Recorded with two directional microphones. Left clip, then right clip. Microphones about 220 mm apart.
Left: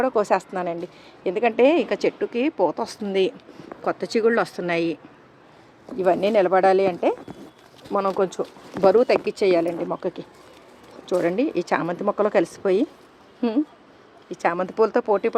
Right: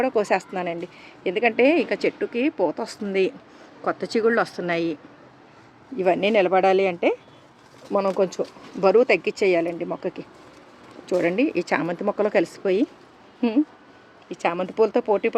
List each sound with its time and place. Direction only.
0.0 s speech: 5° left (ahead or behind)
6.0 s speech: centre (ahead or behind)